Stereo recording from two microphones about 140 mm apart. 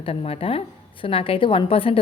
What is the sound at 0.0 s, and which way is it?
A woman's voice, 45° left (ahead or behind).